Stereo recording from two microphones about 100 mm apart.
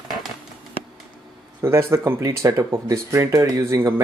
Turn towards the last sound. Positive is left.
turn(degrees=-25)  # may be behind; listen again after turning